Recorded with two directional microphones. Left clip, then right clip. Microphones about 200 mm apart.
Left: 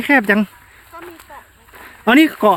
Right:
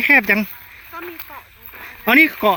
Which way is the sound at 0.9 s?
40° right (ahead or behind).